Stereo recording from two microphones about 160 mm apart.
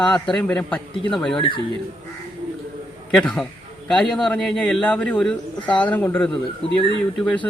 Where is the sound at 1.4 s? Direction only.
30° left (ahead or behind).